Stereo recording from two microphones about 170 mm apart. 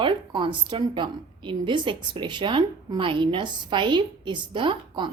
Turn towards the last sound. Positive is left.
turn(degrees=-30)  # may be behind; listen again after turning